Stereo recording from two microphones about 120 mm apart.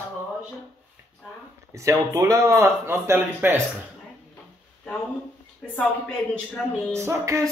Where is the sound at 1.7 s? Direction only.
25° right (ahead or behind).